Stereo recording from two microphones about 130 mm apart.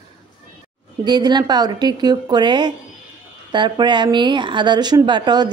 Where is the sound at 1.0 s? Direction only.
35° right (ahead or behind).